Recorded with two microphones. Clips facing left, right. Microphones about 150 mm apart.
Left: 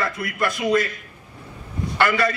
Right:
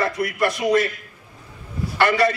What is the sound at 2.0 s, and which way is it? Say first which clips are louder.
Speech: right 2 dB; 25° right (ahead or behind).